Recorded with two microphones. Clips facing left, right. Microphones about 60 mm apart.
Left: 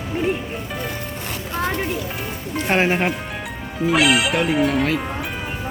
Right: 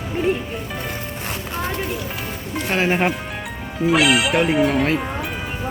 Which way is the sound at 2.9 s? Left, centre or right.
Centre.